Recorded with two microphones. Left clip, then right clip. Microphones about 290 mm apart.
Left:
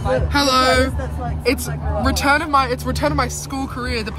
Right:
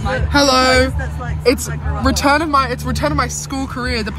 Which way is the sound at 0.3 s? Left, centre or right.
Centre.